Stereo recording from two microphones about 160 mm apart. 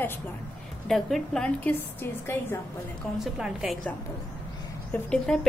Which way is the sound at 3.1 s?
5° right (ahead or behind).